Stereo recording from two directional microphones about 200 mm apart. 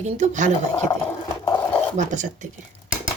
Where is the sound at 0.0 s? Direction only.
35° right (ahead or behind).